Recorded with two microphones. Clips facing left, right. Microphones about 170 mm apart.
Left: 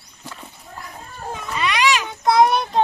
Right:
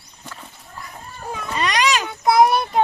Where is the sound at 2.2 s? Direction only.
5° right (ahead or behind).